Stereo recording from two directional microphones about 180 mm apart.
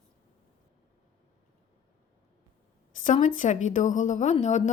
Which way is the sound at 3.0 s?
45° left (ahead or behind).